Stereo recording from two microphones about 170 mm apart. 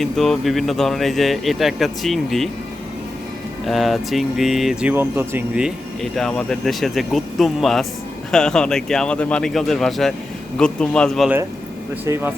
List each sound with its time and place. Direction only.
0.0 s speech: centre (ahead or behind)
3.7 s speech: centre (ahead or behind)
12.0 s speech: 15° right (ahead or behind)